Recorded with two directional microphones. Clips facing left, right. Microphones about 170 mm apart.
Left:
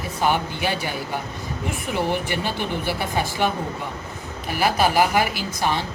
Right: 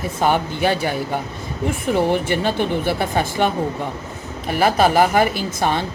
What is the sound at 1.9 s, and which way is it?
A woman's voice, 50° right (ahead or behind).